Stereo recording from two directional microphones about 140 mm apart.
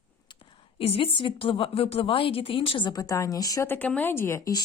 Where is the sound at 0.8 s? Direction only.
40° left (ahead or behind); by 3.7 s 25° left (ahead or behind).